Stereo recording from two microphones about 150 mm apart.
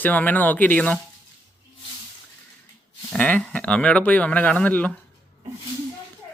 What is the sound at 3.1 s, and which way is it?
Speech, 5° left (ahead or behind).